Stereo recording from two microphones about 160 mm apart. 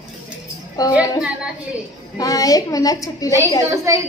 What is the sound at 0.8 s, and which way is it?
Speech, 20° left (ahead or behind).